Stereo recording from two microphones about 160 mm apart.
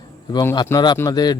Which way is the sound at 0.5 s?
25° left (ahead or behind).